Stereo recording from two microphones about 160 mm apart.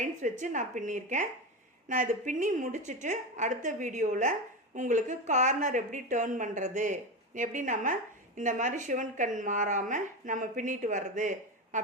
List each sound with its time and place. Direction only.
0.0 s a woman's voice: 55° right (ahead or behind)